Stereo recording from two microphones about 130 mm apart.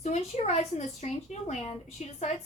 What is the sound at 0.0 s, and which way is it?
A woman's voice, 60° left (ahead or behind).